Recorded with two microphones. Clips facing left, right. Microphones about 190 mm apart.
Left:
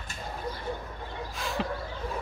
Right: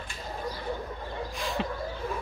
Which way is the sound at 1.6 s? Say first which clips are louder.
Left 2 dB; centre (ahead or behind).